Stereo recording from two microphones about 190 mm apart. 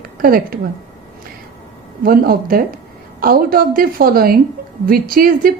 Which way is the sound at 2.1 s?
50° right (ahead or behind).